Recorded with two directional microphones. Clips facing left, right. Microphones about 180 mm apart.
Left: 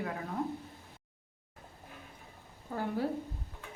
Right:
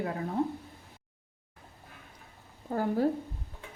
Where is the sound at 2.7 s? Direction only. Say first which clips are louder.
Right 6 dB; 40° right (ahead or behind).